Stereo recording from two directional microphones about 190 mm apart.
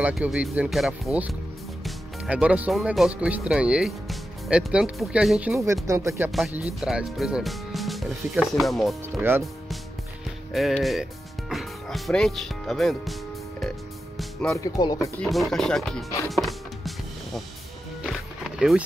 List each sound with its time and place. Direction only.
0.0 s speech: 5° right (ahead or behind)
5.9 s speech: 15° right (ahead or behind); by 9.2 s centre (ahead or behind)
10.5 s speech: centre (ahead or behind)
13.6 s music: 5° left (ahead or behind)
14.6 s speech: 20° left (ahead or behind)
15.1 s speech: centre (ahead or behind)
16.3 s music: centre (ahead or behind)